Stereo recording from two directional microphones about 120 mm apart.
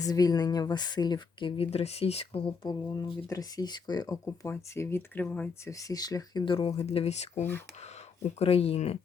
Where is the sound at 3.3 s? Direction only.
30° left (ahead or behind).